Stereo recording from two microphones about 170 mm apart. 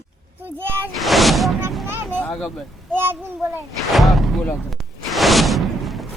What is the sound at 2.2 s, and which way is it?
Vehicle, centre (ahead or behind).